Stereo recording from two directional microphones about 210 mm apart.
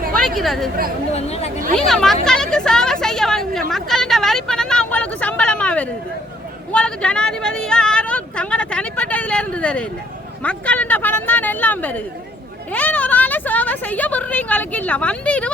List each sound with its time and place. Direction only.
0.2 s speech: centre (ahead or behind)
1.1 s speech: 30° left (ahead or behind)
1.7 s speech: centre (ahead or behind)
3.7 s a sound: centre (ahead or behind)
6.7 s a woman's voice: 5° left (ahead or behind)